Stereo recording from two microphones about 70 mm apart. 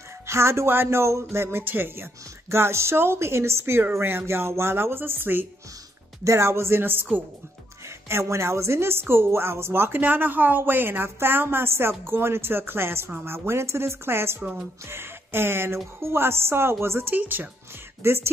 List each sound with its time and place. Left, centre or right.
0.3 s speech: right
6.2 s speech: right
8.1 s speech: right
17.1 s speech: right